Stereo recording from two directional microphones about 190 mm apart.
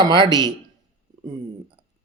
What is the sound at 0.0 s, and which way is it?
Speech, 20° right (ahead or behind).